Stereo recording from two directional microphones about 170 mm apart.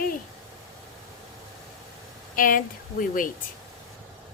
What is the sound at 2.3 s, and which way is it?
Speech, 55° left (ahead or behind).